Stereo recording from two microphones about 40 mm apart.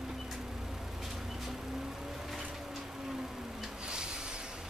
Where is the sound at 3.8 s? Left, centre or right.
Right.